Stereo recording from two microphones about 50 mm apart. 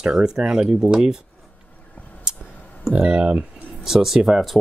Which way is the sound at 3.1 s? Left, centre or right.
Right.